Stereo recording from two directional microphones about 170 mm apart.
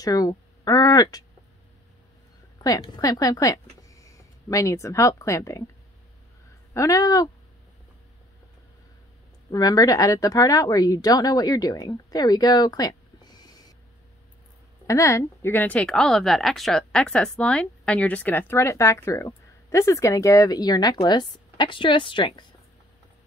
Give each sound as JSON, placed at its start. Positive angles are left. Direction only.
{"t": 0.0, "sound": "speech", "side_deg": 20}
{"t": 2.6, "sound": "speech", "side_deg": 20}
{"t": 6.7, "sound": "speech", "side_deg": 20}
{"t": 9.5, "sound": "speech", "side_deg": 20}
{"t": 14.9, "sound": "speech", "side_deg": 15}